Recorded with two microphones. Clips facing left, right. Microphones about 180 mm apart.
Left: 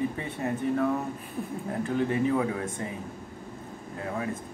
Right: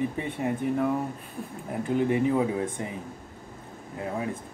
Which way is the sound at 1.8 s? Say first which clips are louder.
Right 3 dB; 15° right (ahead or behind).